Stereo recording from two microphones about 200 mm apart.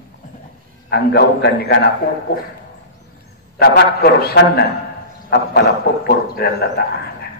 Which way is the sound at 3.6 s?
50° left (ahead or behind).